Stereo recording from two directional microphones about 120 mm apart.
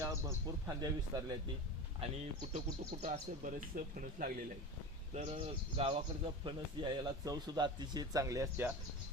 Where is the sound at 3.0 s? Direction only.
70° right (ahead or behind).